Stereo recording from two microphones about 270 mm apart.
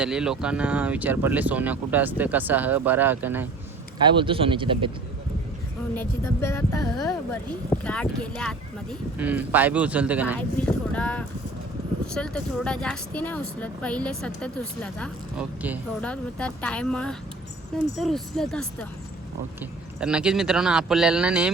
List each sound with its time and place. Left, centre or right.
0.0 s speech: centre
4.0 s speech: centre
6.0 s speech: centre
20.0 s speech: centre